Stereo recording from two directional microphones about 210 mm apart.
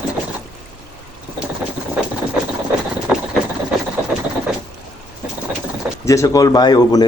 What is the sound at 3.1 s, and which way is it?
Vehicle, 5° right (ahead or behind).